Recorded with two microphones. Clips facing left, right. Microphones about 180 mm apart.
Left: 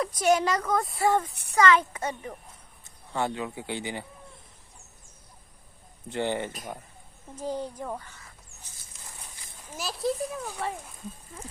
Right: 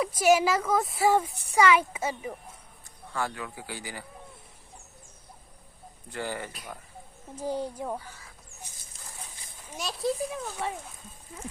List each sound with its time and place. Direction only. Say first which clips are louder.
0.0 s a woman's voice: right 1 dB; 5° right (ahead or behind)
3.1 s a man's voice: left 4 dB; 25° left (ahead or behind)
6.1 s a man's voice: left 6 dB; 25° left (ahead or behind)
7.3 s a woman's voice: right 1 dB; 10° right (ahead or behind)
9.7 s speech: even; centre (ahead or behind)